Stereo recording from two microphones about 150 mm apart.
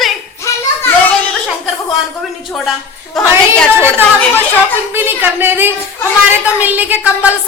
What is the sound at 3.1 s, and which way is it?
Speech, centre (ahead or behind).